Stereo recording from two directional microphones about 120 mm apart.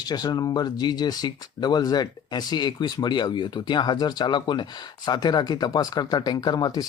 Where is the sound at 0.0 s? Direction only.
35° left (ahead or behind).